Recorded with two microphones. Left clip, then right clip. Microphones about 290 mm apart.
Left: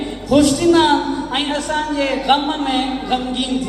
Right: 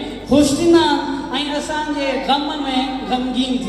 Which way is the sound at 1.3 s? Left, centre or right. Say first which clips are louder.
Left 2 dB; left.